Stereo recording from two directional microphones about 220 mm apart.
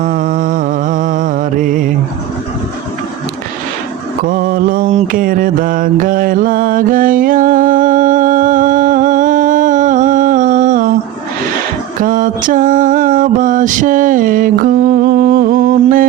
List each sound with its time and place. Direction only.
0.0 s music: 40° right (ahead or behind)
4.2 s mantra: 40° right (ahead or behind)
11.9 s mantra: 35° right (ahead or behind)